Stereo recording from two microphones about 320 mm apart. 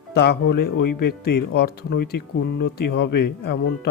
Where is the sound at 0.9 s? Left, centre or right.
Left.